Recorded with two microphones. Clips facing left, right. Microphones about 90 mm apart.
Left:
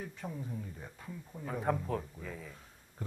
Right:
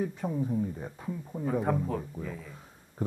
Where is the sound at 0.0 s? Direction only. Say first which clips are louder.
Right 11 dB; 20° right (ahead or behind).